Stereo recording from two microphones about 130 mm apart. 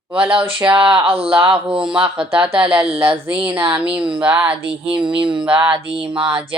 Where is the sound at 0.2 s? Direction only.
40° right (ahead or behind).